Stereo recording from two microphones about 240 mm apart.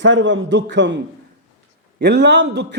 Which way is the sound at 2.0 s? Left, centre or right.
Right.